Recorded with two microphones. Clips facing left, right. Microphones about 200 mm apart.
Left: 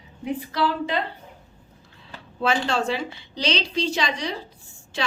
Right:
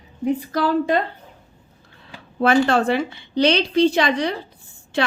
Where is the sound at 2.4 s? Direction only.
55° right (ahead or behind).